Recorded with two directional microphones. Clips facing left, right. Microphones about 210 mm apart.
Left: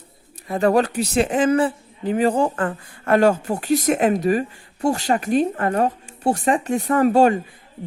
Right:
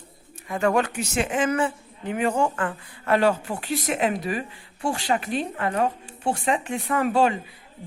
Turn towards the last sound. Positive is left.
turn(degrees=45)  # may be behind; listen again after turning